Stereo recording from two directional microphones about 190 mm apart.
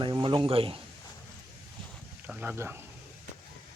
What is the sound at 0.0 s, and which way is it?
Speech, 25° right (ahead or behind).